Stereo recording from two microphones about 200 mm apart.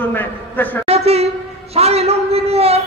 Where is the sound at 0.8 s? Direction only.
30° right (ahead or behind).